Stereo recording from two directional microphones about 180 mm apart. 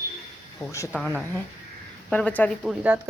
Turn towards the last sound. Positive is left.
turn(degrees=-10)  # may be behind; listen again after turning